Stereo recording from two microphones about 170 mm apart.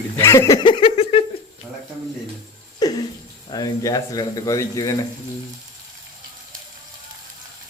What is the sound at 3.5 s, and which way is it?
Speech, 20° left (ahead or behind).